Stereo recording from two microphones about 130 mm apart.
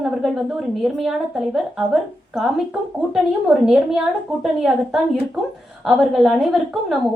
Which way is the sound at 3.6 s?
5° right (ahead or behind).